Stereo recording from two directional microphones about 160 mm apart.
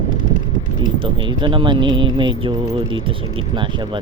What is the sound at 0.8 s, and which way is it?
Speech, 30° right (ahead or behind).